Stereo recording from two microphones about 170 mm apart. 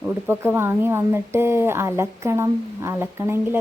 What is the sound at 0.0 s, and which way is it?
A woman's voice, 15° right (ahead or behind).